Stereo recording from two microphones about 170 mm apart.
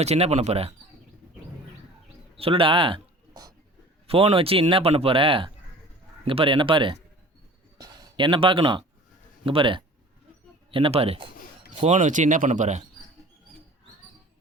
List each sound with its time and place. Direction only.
0.0 s speech: 40° right (ahead or behind)
2.3 s speech: 35° right (ahead or behind)
11.7 s speech: 45° right (ahead or behind)